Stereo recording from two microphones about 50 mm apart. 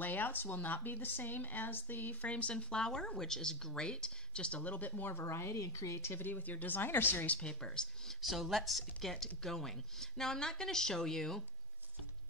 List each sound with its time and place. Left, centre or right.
0.0 s speech: left
5.2 s speech: left
6.1 s speech: left
7.3 s speech: centre
8.2 s speech: centre